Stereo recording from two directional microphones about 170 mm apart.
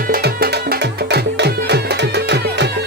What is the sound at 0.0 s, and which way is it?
Music, 65° right (ahead or behind).